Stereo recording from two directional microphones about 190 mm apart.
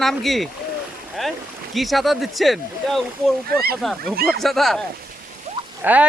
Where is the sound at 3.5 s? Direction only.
55° right (ahead or behind).